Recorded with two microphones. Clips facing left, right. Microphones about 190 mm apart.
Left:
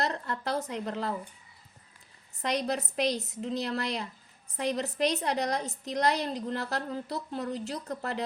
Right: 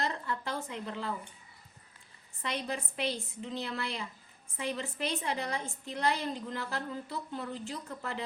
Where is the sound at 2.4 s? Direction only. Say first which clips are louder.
Left 6 dB; 40° left (ahead or behind).